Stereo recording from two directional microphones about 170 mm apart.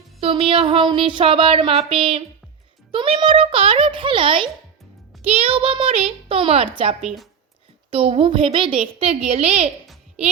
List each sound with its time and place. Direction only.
0.2 s a woman's voice: 35° right (ahead or behind)
7.0 s a woman's voice: centre (ahead or behind)
7.9 s a woman's voice: 35° right (ahead or behind)